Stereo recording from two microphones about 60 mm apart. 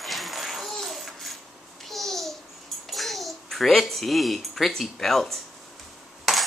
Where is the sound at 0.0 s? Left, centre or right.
Centre.